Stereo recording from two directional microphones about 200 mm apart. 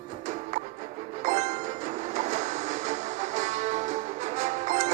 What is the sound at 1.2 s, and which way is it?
Music, 35° right (ahead or behind).